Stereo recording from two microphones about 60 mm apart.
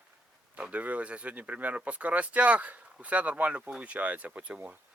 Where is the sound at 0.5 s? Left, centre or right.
Right.